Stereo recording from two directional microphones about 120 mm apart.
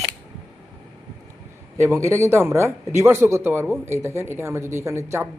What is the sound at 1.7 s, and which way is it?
A man's voice, 25° right (ahead or behind).